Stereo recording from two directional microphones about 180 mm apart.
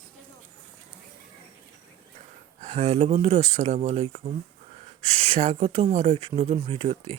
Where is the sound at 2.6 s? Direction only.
35° right (ahead or behind).